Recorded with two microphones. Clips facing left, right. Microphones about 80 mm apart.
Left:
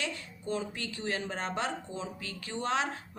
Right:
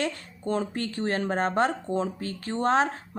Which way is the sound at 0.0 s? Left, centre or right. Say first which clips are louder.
Right 7 dB; right.